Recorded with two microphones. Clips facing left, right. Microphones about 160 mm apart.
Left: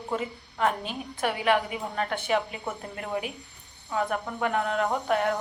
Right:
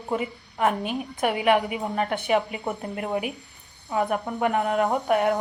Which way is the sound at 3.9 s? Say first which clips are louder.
Right 4 dB; 20° right (ahead or behind).